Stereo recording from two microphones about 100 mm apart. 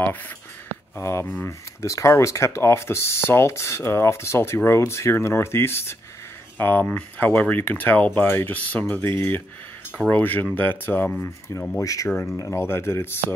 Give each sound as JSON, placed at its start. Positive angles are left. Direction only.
{"t": 0.9, "sound": "speech", "side_deg": 30}
{"t": 11.2, "sound": "speech", "side_deg": 30}